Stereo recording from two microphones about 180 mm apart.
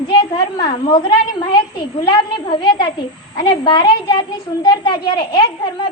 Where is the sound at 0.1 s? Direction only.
25° left (ahead or behind).